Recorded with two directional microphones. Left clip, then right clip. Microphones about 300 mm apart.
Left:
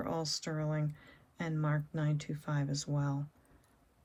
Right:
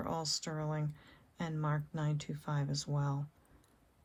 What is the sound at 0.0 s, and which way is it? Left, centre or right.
Speech, centre.